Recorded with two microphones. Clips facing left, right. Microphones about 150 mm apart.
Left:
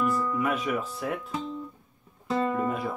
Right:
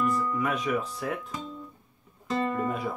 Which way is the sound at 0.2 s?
5° left (ahead or behind).